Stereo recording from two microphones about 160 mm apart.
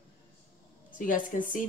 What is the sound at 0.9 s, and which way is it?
Speech, 55° left (ahead or behind).